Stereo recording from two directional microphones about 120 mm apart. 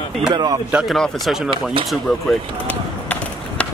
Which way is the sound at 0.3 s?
35° right (ahead or behind).